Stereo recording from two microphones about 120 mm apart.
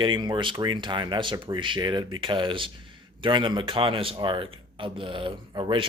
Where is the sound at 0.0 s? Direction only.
40° right (ahead or behind).